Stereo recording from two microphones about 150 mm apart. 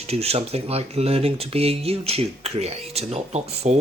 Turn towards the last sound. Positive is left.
turn(degrees=-45)  # may be behind; listen again after turning